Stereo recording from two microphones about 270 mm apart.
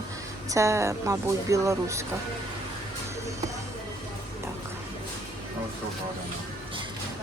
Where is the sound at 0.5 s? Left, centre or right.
Centre.